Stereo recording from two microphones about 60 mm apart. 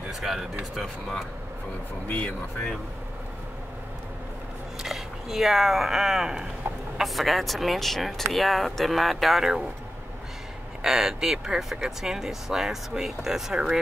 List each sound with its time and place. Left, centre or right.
0.1 s speech: centre
2.0 s speech: left
4.8 s speech: centre
10.8 s speech: centre